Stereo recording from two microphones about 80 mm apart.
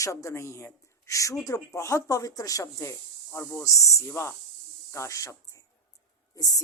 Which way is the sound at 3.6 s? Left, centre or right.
Left.